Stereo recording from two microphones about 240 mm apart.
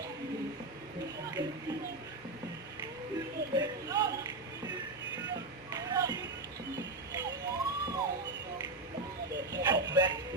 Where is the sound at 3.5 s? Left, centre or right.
Centre.